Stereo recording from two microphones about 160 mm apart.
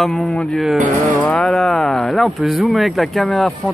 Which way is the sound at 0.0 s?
Centre (ahead or behind).